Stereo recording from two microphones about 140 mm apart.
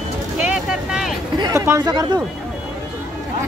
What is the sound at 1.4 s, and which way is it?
Speech, 25° right (ahead or behind).